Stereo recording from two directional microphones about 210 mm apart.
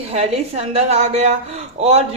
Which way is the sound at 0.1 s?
30° right (ahead or behind).